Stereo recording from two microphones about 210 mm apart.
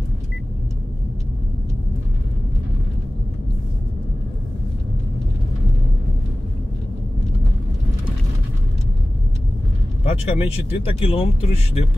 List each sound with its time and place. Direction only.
10.0 s speech: 25° left (ahead or behind)